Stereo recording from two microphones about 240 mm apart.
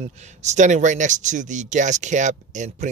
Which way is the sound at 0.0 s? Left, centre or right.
Right.